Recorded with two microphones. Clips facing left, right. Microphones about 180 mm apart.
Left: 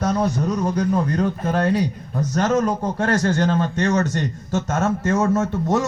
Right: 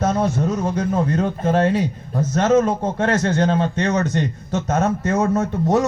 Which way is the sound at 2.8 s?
20° right (ahead or behind).